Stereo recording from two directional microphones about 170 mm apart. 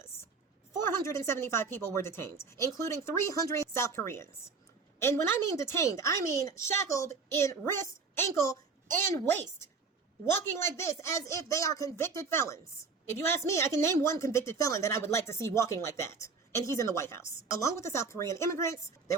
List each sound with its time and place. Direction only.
1.0 s a woman's voice: 15° left (ahead or behind)
10.5 s a woman's voice: 15° left (ahead or behind)